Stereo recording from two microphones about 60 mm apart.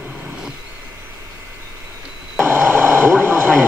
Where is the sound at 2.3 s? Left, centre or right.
Right.